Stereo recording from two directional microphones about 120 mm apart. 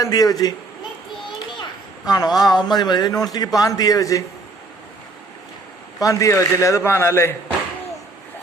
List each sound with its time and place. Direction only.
0.0 s a man's voice: 30° left (ahead or behind)
2.0 s a man's voice: 35° left (ahead or behind)
6.0 s a man's voice: 30° left (ahead or behind)